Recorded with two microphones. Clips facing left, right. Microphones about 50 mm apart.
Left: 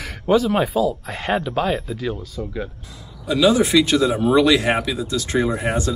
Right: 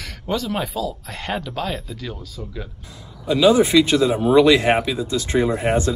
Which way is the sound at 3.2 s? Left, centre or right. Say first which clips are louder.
Right 2 dB; right.